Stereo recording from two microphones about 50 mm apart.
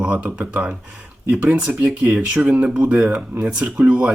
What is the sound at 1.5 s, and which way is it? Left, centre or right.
Speech, centre.